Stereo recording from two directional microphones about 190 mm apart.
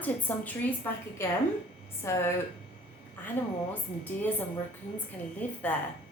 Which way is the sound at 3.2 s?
10° left (ahead or behind).